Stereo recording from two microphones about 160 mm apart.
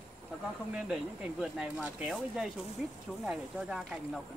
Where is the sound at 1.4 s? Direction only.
5° right (ahead or behind).